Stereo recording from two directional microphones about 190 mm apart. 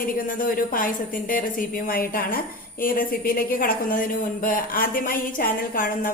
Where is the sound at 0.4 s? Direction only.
45° left (ahead or behind).